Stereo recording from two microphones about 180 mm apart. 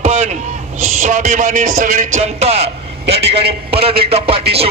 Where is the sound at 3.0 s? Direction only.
70° right (ahead or behind).